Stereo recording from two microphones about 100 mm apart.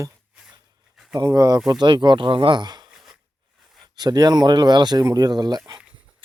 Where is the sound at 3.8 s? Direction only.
45° right (ahead or behind).